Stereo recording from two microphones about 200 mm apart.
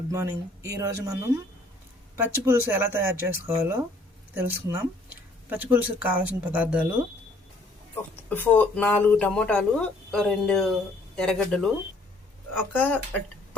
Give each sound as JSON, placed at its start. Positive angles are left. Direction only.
{"t": 0.1, "sound": "speech", "side_deg": -15}
{"t": 8.3, "sound": "speech", "side_deg": 10}
{"t": 12.7, "sound": "speech", "side_deg": 10}